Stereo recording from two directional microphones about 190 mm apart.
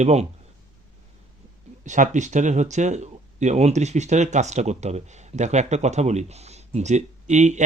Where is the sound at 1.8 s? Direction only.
40° right (ahead or behind).